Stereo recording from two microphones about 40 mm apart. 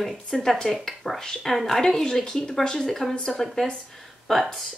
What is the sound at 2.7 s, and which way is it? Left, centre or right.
Speech, centre.